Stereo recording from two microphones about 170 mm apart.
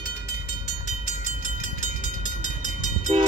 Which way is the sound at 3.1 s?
35° right (ahead or behind).